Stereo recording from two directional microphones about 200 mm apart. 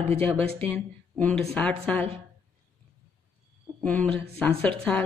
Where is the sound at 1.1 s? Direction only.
5° left (ahead or behind).